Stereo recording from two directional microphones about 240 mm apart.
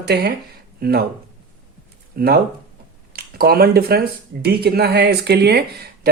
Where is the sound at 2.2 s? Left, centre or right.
Right.